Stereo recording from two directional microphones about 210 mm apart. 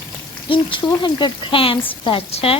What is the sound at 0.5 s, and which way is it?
Speech, 20° left (ahead or behind).